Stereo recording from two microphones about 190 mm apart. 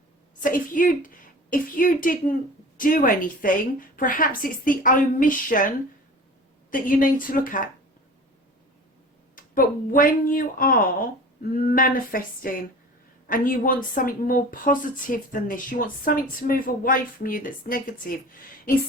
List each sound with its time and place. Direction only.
0.3 s a woman's voice: 45° left (ahead or behind)
9.3 s speech: 45° left (ahead or behind)